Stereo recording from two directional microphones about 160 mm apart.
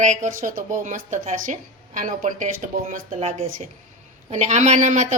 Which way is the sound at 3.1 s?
40° right (ahead or behind).